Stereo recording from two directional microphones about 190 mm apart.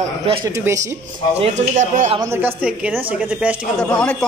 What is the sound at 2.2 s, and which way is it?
Speech, 10° right (ahead or behind).